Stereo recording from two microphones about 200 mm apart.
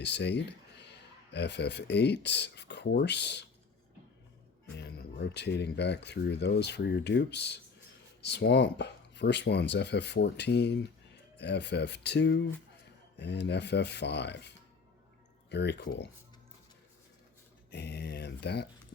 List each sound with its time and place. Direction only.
0.0 s speech: 60° left (ahead or behind)
4.6 s speech: 55° left (ahead or behind)
17.7 s speech: 55° left (ahead or behind)